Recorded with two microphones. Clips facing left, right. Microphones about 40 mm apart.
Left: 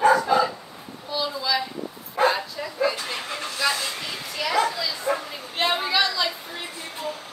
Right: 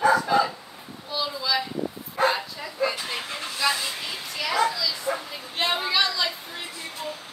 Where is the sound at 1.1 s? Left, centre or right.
Centre.